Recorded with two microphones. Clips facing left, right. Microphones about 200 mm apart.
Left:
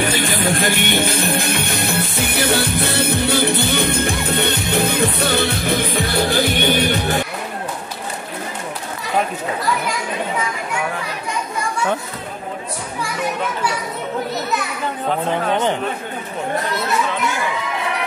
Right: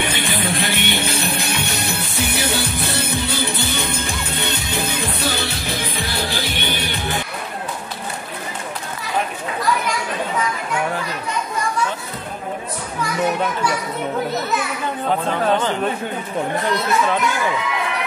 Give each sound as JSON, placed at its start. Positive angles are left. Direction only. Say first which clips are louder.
{"t": 0.0, "sound": "music", "louder": "left 4 dB", "side_deg": 45}